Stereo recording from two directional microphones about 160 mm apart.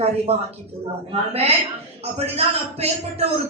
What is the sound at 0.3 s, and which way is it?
A man's voice, 40° right (ahead or behind).